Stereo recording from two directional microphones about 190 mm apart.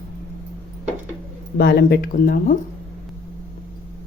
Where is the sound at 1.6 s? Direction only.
60° left (ahead or behind).